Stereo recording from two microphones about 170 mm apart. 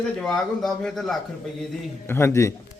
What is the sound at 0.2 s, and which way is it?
A man's voice, centre (ahead or behind).